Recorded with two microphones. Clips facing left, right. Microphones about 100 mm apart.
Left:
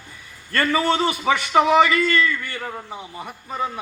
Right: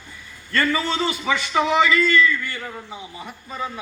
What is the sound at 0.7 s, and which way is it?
A man's voice, 60° left (ahead or behind).